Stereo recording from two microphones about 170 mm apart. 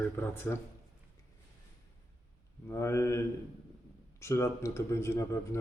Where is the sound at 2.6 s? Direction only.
15° left (ahead or behind).